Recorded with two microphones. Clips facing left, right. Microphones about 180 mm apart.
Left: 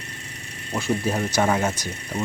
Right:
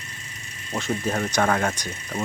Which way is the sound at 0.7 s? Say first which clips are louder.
Left 2 dB; 5° left (ahead or behind).